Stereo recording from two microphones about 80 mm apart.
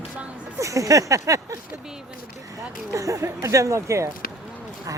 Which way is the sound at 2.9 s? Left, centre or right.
Right.